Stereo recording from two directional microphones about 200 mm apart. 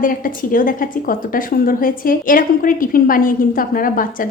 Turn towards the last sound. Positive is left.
turn(degrees=45)  # may be behind; listen again after turning